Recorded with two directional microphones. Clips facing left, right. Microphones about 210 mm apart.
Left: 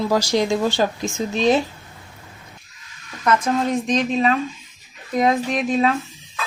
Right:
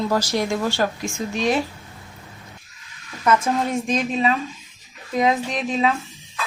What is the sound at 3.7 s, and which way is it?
Speech, 5° right (ahead or behind).